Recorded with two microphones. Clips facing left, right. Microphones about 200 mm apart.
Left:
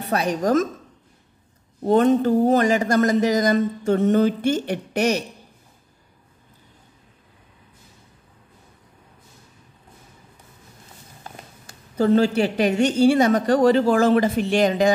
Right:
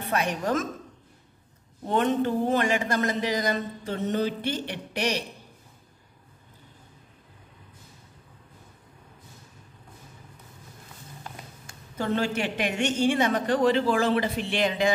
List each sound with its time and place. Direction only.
0.0 s a woman's voice: 35° left (ahead or behind)
1.8 s a man's voice: 40° left (ahead or behind)
11.2 s a woman's voice: 35° left (ahead or behind)